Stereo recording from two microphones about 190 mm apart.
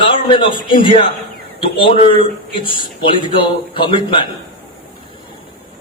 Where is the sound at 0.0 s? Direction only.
25° left (ahead or behind).